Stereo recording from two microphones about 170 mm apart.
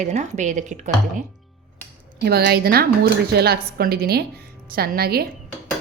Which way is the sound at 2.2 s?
70° right (ahead or behind).